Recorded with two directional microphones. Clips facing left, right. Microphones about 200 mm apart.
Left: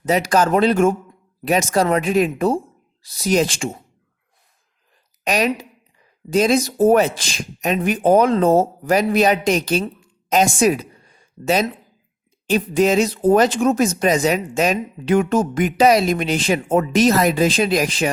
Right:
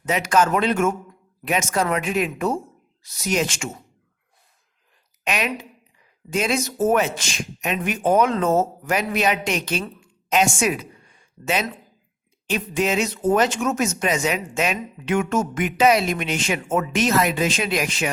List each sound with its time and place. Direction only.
0.0 s speech: 35° left (ahead or behind)
5.2 s speech: 35° left (ahead or behind)
10.0 s a sound: 35° left (ahead or behind)
12.5 s speech: 35° left (ahead or behind)